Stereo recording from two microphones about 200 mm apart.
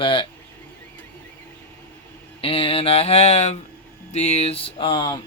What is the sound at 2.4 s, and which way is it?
Speech, 25° left (ahead or behind).